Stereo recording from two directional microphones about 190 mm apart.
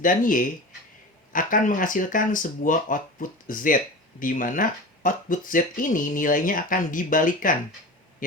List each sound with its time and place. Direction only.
0.0 s speech: 45° left (ahead or behind)